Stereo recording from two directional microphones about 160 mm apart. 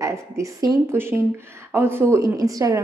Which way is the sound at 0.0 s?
20° right (ahead or behind).